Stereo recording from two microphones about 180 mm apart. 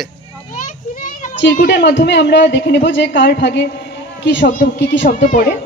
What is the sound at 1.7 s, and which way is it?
A woman's voice, 75° left (ahead or behind).